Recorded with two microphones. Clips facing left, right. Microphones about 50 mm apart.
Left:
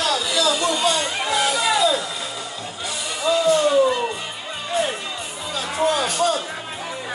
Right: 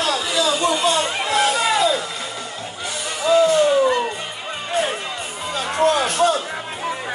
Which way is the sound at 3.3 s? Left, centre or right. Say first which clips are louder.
Right 5 dB; right.